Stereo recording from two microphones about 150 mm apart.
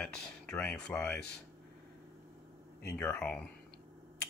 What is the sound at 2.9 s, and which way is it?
Speech, 10° left (ahead or behind).